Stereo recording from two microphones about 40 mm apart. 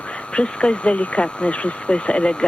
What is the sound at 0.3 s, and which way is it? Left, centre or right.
Speech, left.